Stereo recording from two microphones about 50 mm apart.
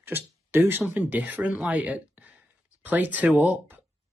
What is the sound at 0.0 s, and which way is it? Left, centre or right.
Speech, right.